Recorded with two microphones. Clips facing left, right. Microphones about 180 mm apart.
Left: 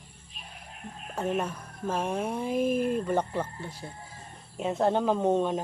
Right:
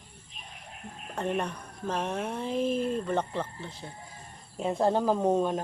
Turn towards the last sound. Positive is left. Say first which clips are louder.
# even
turn(degrees=-5)  # may be behind; listen again after turning